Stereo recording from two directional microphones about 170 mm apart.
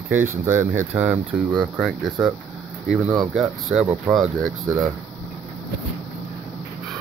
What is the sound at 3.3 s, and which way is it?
Speech, 5° right (ahead or behind).